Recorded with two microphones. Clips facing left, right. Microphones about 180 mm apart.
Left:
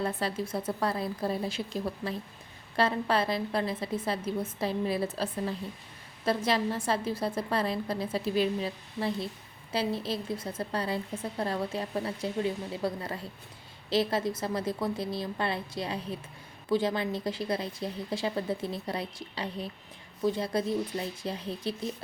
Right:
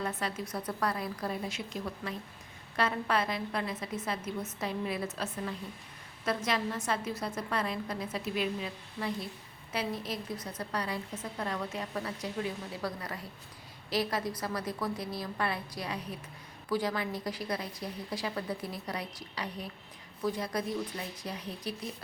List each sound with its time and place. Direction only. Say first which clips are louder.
0.0 s a woman's voice: left 4 dB; 30° left (ahead or behind)